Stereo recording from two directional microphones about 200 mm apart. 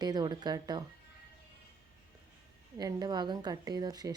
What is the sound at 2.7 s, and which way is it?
Speech, 20° right (ahead or behind).